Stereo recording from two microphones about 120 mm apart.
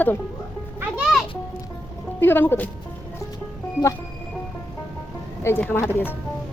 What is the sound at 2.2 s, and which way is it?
Speech, 15° left (ahead or behind).